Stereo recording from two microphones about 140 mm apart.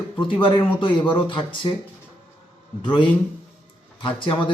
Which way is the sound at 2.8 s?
35° left (ahead or behind).